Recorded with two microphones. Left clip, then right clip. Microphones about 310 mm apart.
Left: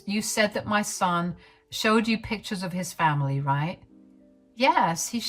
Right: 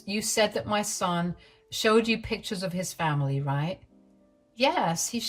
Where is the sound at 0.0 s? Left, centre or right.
Centre.